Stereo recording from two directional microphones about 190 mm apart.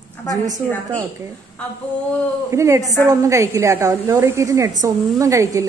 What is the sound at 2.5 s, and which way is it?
A woman's voice, 15° right (ahead or behind).